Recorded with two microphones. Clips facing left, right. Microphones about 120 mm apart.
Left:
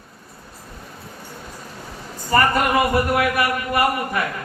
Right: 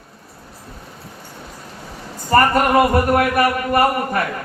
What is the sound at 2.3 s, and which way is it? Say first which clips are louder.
A man's voice: right 4 dB; 40° right (ahead or behind).